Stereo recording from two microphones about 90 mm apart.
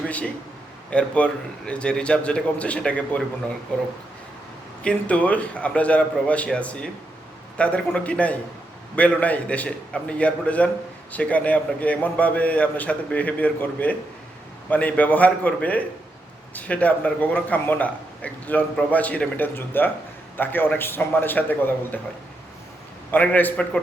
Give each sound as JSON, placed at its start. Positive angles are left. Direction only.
{"t": 0.9, "sound": "a man's voice", "side_deg": 15}
{"t": 23.1, "sound": "a man's voice", "side_deg": 20}